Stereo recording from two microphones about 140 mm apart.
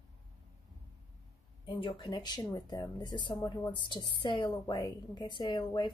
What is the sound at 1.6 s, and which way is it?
Speech, 35° left (ahead or behind).